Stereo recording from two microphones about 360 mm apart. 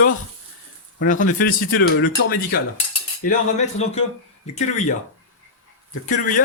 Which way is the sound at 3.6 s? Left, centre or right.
Centre.